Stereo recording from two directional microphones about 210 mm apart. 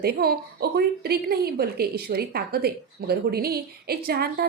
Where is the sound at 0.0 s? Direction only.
45° right (ahead or behind).